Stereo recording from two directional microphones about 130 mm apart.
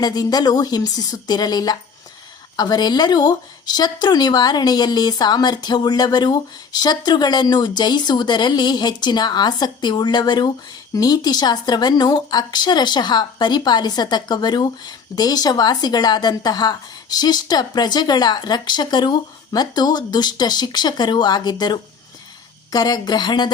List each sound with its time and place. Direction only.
0.0 s a woman's voice: 30° left (ahead or behind)